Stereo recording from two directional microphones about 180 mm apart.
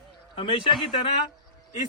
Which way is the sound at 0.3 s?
30° left (ahead or behind).